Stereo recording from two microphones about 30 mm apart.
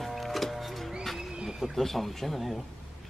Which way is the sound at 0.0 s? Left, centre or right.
Centre.